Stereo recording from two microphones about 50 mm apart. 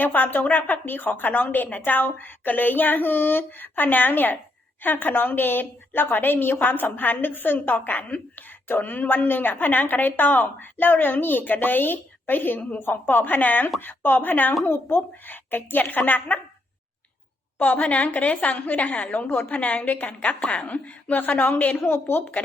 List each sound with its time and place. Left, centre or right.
0.0 s a woman's voice: left
14.6 s a woman's voice: left
17.6 s a woman's voice: left
21.8 s speech: left